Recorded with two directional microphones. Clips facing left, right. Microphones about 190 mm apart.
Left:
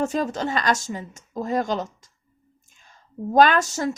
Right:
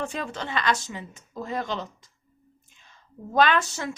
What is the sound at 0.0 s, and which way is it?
A woman's voice, 40° left (ahead or behind).